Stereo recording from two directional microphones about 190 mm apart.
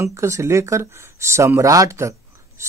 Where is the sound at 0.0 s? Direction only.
15° right (ahead or behind).